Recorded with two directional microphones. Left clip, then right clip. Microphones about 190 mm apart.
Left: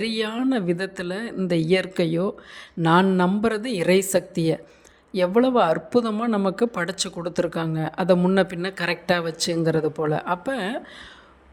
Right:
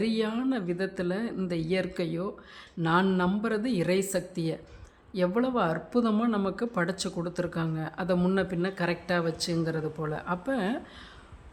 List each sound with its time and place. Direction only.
0.0 s speech: 30° left (ahead or behind)